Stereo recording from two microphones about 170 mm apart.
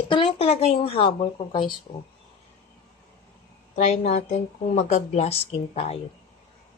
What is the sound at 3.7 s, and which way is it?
A woman's voice, 45° left (ahead or behind).